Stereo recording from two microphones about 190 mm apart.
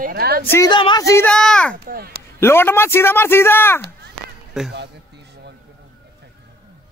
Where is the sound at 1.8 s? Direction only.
55° right (ahead or behind).